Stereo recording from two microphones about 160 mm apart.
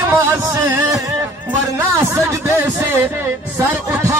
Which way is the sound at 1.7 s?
20° right (ahead or behind).